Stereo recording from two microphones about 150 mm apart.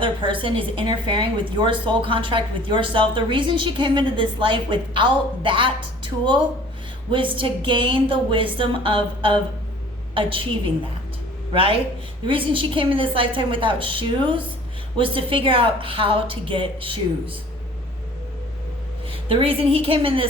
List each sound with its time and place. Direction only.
0.0 s a woman's voice: 35° right (ahead or behind)
11.5 s a woman's voice: 40° right (ahead or behind)
19.0 s a woman's voice: 40° right (ahead or behind)